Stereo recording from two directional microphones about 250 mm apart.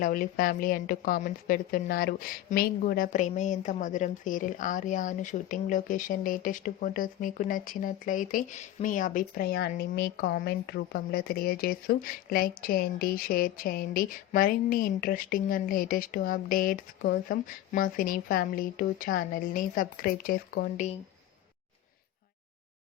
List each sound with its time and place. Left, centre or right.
0.0 s a woman's voice: left